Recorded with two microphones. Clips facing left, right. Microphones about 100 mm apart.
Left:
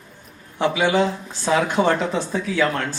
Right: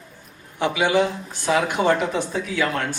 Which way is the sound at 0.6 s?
15° right (ahead or behind).